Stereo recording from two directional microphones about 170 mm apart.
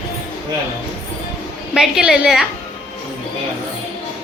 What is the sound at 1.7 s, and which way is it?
Speech, centre (ahead or behind).